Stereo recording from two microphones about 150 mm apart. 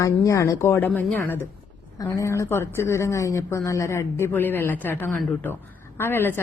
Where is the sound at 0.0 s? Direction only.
20° left (ahead or behind).